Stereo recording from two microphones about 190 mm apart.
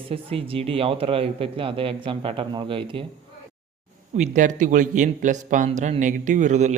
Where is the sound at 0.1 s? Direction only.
30° right (ahead or behind).